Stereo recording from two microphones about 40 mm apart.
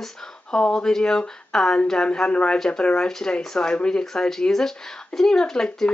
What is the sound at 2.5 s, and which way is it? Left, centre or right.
Speech, centre.